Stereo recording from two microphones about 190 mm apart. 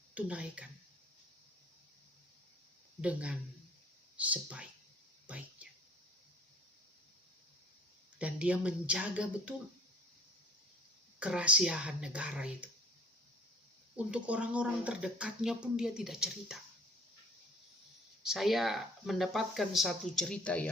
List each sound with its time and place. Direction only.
0.1 s speech: 5° right (ahead or behind)
3.0 s speech: 5° right (ahead or behind)
8.2 s speech: 5° right (ahead or behind)
11.2 s speech: 5° right (ahead or behind)
13.9 s speech: 5° right (ahead or behind)
18.2 s speech: centre (ahead or behind)